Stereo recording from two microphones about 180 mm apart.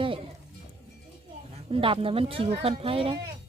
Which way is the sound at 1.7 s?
30° right (ahead or behind).